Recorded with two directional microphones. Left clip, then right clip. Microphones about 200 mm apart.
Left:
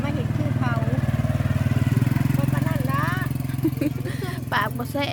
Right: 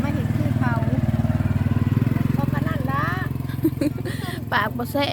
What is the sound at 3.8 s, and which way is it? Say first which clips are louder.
Vehicle: right 2 dB; 15° right (ahead or behind).